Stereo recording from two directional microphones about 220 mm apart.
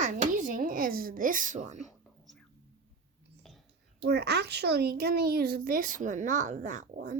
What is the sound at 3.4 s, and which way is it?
Whispering, centre (ahead or behind).